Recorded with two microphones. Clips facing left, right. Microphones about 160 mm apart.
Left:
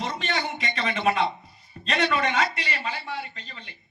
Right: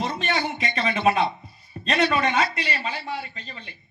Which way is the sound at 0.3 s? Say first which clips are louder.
Right 3 dB; 50° right (ahead or behind).